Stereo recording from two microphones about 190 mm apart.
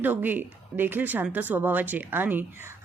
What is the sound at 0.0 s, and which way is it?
Speech, 10° right (ahead or behind).